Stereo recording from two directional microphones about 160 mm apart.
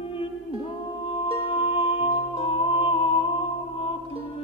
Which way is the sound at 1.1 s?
35° left (ahead or behind).